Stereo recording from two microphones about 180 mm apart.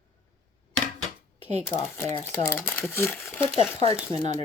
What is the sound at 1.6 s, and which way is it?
Speech, 15° left (ahead or behind).